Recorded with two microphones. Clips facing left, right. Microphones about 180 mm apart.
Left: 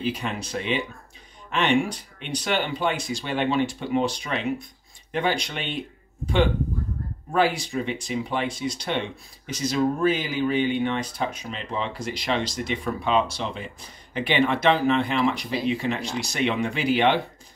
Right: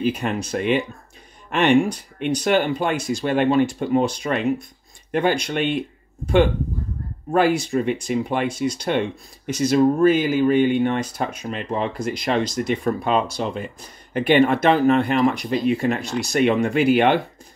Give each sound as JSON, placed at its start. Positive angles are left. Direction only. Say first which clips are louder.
{"t": 0.0, "sound": "speech", "louder": "right 6 dB", "side_deg": -50}
{"t": 7.3, "sound": "speech", "louder": "right 5 dB", "side_deg": -50}